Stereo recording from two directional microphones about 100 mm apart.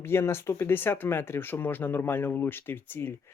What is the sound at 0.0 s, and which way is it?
Speech, 25° left (ahead or behind).